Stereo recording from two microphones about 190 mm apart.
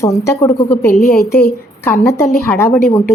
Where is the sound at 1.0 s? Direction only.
55° left (ahead or behind).